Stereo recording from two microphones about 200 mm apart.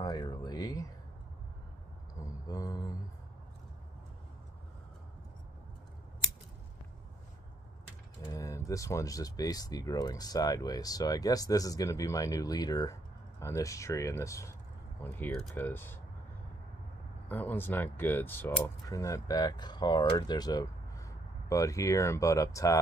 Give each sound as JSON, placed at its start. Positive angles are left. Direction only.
{"t": 0.0, "sound": "a sound", "side_deg": 20}
{"t": 2.4, "sound": "speech", "side_deg": 20}
{"t": 8.3, "sound": "speech", "side_deg": 15}
{"t": 17.3, "sound": "speech", "side_deg": 10}